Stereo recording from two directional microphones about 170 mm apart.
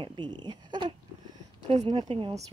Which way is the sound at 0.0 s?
25° right (ahead or behind).